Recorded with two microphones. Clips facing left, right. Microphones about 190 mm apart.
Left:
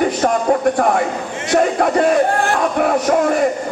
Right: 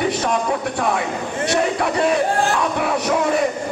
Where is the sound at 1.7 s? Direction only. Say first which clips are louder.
Left 5 dB; 50° left (ahead or behind).